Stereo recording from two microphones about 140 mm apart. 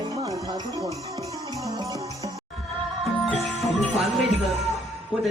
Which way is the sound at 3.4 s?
Centre (ahead or behind).